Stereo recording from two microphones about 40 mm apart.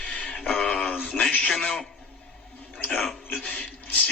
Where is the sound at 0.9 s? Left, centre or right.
Left.